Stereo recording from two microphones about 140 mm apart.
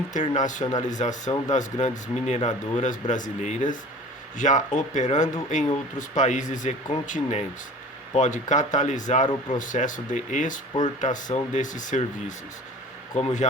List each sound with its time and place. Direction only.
0.1 s speech: 60° left (ahead or behind)
13.1 s speech: 55° left (ahead or behind)